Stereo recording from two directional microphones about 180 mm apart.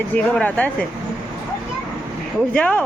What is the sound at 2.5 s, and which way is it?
Speech, 10° left (ahead or behind).